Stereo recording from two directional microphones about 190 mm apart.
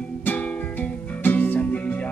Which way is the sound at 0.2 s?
10° left (ahead or behind).